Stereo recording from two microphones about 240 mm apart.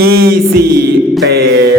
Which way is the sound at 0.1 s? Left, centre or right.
Right.